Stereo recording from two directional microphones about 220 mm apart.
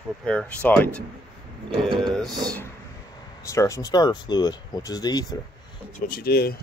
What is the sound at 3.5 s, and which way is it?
Speech, 15° left (ahead or behind).